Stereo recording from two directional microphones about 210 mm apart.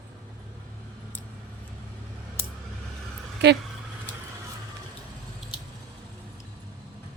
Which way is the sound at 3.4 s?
55° right (ahead or behind).